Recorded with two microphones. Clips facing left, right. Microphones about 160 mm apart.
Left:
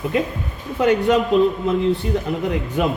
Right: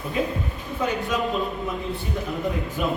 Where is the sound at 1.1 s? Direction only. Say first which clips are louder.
Left 10 dB; 75° left (ahead or behind).